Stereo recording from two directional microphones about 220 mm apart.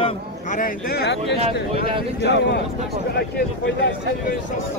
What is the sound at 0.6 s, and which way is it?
Speech, 45° left (ahead or behind).